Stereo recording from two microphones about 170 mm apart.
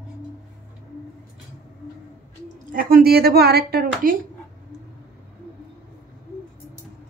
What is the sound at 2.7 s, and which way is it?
A woman's voice, 55° right (ahead or behind).